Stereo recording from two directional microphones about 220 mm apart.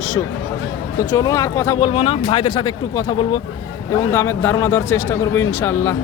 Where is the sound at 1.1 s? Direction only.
15° left (ahead or behind).